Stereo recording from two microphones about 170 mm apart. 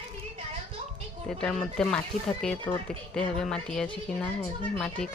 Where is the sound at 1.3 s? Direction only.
5° left (ahead or behind).